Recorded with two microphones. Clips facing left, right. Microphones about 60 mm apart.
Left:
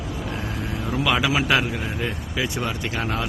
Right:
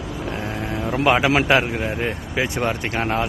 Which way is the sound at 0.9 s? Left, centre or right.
Right.